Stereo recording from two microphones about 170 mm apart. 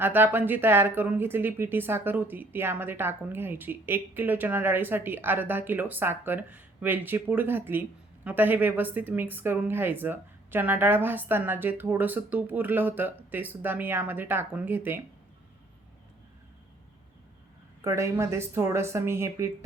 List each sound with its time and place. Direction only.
0.0 s speech: 10° right (ahead or behind)
17.8 s speech: 15° right (ahead or behind)